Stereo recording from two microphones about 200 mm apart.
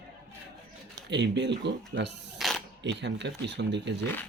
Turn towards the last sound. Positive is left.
turn(degrees=-60)  # may be behind; listen again after turning